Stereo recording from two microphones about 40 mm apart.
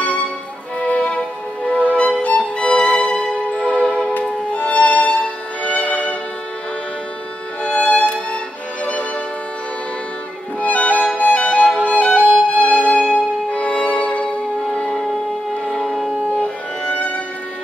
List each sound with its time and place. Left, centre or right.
0.7 s music: left
4.6 s music: left
7.6 s music: left
10.6 s music: left
13.5 s violin: left
14.6 s music: centre
15.6 s shofar: centre
16.3 s music: left